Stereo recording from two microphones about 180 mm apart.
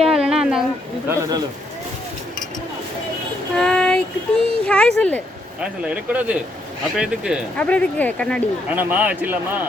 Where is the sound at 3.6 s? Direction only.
5° left (ahead or behind).